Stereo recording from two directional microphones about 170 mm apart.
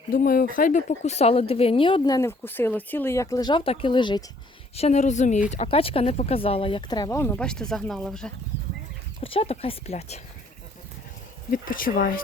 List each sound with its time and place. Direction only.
0.1 s a woman's voice: 55° left (ahead or behind); by 4.2 s 25° left (ahead or behind)
4.7 s a woman's voice: 40° left (ahead or behind); by 8.3 s 5° left (ahead or behind)
9.2 s a woman's voice: 35° left (ahead or behind)
11.5 s speech: 55° left (ahead or behind)